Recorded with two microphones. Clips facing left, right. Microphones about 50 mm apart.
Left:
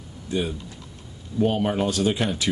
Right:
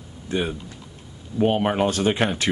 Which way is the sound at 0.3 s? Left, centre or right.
Right.